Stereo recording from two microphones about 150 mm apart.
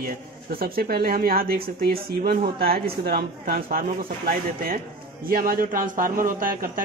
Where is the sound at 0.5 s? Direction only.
85° right.